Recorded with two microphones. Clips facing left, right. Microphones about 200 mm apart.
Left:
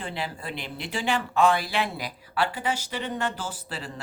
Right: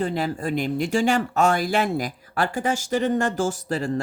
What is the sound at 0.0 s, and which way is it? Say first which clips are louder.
Speech: right 9 dB; 45° right (ahead or behind).